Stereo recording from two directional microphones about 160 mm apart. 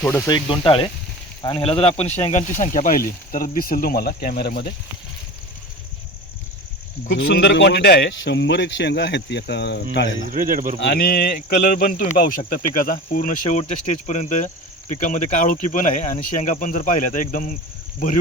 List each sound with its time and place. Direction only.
0.0 s speech: 10° left (ahead or behind)
0.3 s speech: 30° left (ahead or behind); by 4.7 s 70° left (ahead or behind)
7.3 s a man's voice: 90° left
10.2 s speech: 55° right (ahead or behind)
10.9 s speech: 75° left (ahead or behind); by 17.6 s 55° left (ahead or behind)